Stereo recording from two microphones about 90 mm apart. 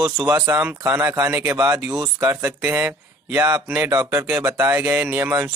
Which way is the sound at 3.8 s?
35° right (ahead or behind).